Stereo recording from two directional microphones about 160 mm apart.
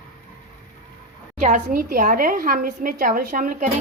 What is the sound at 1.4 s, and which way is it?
A woman's voice, 55° right (ahead or behind).